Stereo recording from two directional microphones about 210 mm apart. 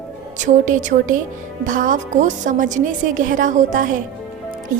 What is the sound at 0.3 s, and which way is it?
A woman's voice, 35° right (ahead or behind).